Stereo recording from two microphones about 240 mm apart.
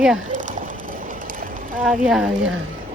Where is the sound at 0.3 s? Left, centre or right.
Right.